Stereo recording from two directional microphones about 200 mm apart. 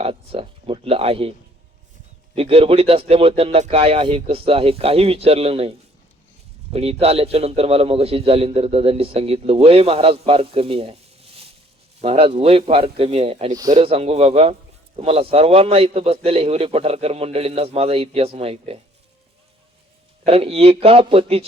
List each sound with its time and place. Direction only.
0.0 s a sound: 30° right (ahead or behind)
2.3 s a man's voice: 30° right (ahead or behind)
7.0 s a man's voice: 30° right (ahead or behind)
12.0 s a man's voice: 30° right (ahead or behind)
20.2 s a man's voice: 30° right (ahead or behind)